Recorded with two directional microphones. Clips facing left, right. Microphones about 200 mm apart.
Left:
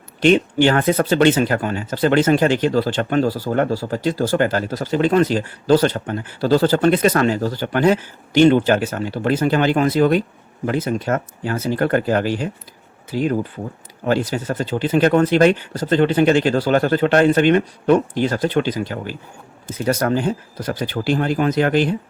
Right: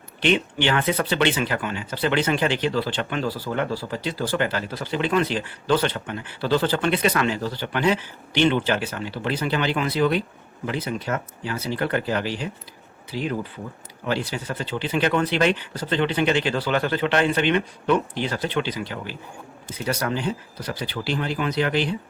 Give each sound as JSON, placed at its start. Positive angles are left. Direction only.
{"t": 0.2, "sound": "speech", "side_deg": 45}